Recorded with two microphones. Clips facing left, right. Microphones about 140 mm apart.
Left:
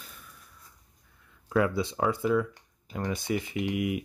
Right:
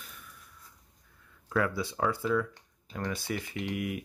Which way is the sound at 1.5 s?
20° left (ahead or behind).